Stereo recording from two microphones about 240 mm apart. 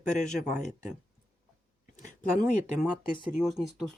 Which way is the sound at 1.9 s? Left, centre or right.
Left.